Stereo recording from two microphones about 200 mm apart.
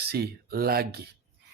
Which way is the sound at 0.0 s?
50° right (ahead or behind).